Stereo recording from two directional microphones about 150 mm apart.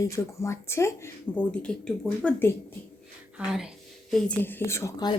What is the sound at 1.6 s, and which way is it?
Speech, 5° left (ahead or behind).